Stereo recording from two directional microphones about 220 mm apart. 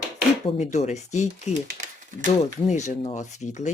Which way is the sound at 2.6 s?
30° left (ahead or behind).